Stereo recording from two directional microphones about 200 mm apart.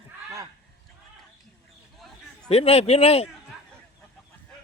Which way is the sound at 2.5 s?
30° left (ahead or behind).